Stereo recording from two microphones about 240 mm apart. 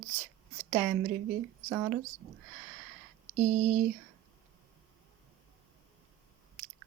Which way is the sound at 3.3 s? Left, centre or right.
Right.